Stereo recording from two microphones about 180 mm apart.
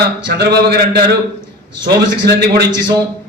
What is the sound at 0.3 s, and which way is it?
Speech, 65° right (ahead or behind).